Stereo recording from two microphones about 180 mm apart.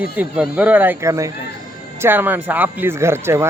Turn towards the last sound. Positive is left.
turn(degrees=-15)  # may be behind; listen again after turning